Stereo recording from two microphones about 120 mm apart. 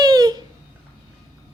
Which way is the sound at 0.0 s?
35° right (ahead or behind).